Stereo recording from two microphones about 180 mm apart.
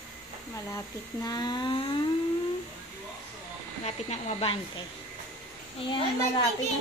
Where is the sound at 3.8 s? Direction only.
35° left (ahead or behind).